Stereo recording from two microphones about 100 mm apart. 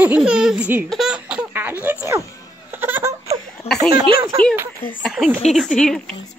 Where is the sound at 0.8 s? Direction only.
5° right (ahead or behind).